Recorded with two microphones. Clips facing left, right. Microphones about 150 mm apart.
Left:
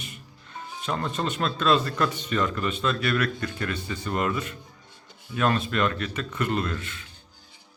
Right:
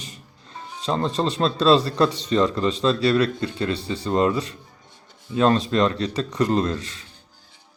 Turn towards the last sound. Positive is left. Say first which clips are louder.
# right 6 dB
turn(degrees=-35)  # may be behind; listen again after turning